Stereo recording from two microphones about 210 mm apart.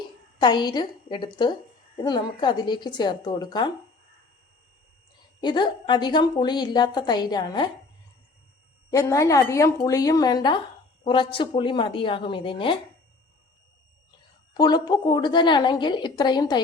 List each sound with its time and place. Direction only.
0.3 s a woman's voice: 20° left (ahead or behind)
5.4 s a woman's voice: 20° left (ahead or behind)
8.9 s a woman's voice: 15° left (ahead or behind)
14.5 s a woman's voice: 20° left (ahead or behind)